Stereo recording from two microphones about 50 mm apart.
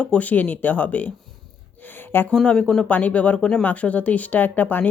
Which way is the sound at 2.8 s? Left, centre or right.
Left.